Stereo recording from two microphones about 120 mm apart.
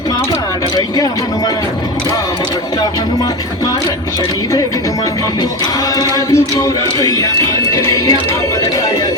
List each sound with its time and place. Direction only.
6.0 s speech: 25° left (ahead or behind)